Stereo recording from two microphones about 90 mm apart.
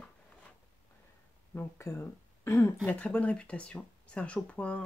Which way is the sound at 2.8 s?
15° left (ahead or behind).